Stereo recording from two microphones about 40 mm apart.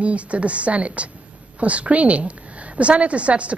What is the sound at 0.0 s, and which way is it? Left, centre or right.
A woman's voice, right.